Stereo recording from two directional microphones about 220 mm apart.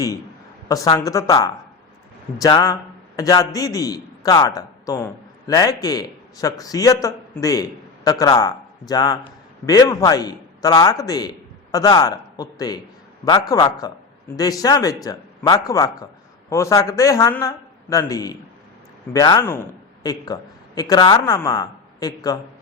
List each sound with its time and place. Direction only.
0.7 s a man's voice: 15° left (ahead or behind)